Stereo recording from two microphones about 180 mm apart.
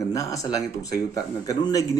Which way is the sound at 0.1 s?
20° left (ahead or behind).